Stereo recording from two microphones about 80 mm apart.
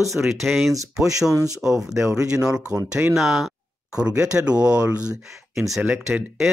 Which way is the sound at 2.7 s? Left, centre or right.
Right.